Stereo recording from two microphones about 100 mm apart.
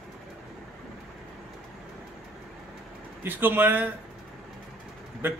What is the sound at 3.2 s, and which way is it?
Speech, 20° right (ahead or behind).